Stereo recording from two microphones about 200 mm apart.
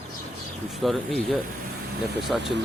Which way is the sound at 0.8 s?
Centre (ahead or behind).